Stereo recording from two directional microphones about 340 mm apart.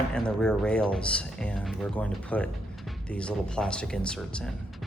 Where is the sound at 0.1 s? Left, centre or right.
Centre.